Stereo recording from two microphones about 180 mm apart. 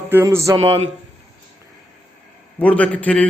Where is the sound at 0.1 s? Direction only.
15° right (ahead or behind).